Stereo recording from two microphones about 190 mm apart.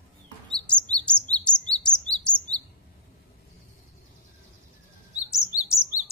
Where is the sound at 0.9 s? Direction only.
5° left (ahead or behind).